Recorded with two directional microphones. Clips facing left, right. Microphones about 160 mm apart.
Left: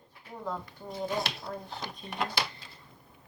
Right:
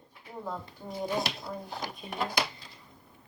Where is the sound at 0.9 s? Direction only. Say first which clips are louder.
Right 1 dB; 5° right (ahead or behind).